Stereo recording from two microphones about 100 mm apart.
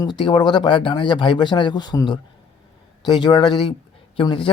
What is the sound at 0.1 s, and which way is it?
Speech, 50° left (ahead or behind).